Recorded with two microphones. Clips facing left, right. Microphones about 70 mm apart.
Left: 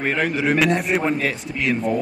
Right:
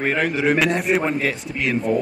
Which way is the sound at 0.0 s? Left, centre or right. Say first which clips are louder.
Right 1 dB; centre.